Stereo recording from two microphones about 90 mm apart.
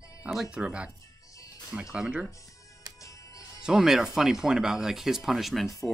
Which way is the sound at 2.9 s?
40° left (ahead or behind).